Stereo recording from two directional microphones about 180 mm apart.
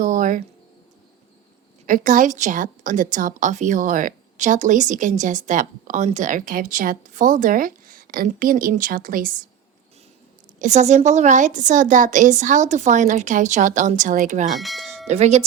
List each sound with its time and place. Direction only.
0.0 s a sound: 45° right (ahead or behind)
1.9 s a woman's voice: 45° right (ahead or behind)
10.6 s a woman's voice: 40° right (ahead or behind)
14.6 s speech: centre (ahead or behind)
15.0 s speech: 40° right (ahead or behind)